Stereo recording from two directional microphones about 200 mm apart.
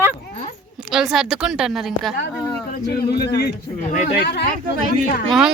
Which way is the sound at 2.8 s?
55° left (ahead or behind).